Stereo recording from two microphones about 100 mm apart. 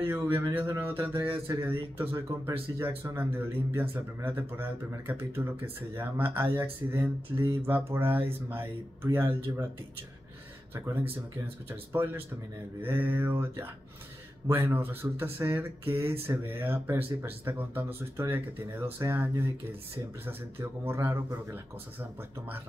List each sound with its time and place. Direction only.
0.1 s speech: 25° right (ahead or behind)
11.7 s speech: 25° right (ahead or behind)